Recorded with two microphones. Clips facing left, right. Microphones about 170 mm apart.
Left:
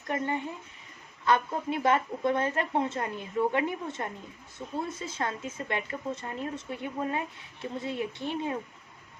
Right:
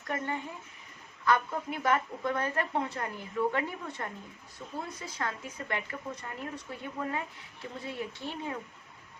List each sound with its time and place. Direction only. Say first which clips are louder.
1.2 s speech: left 2 dB; 25° left (ahead or behind)